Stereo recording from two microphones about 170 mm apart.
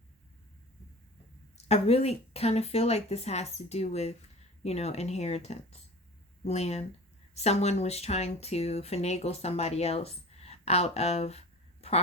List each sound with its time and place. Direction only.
1.5 s speech: 40° left (ahead or behind)